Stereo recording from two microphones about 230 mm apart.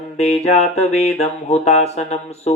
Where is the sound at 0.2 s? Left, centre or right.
Left.